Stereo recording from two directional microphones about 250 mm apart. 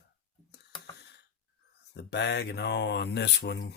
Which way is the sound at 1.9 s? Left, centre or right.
Left.